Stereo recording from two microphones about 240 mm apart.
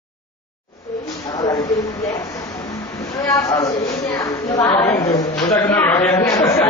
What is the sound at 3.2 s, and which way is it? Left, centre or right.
Speech, centre.